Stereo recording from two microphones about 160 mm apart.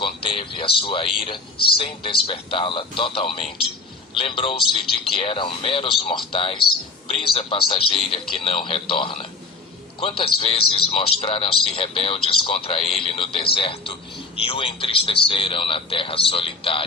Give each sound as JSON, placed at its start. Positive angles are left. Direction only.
{"t": 0.0, "sound": "a man's voice", "side_deg": 35}